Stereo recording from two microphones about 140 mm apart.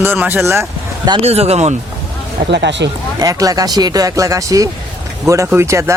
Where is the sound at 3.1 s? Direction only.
25° right (ahead or behind).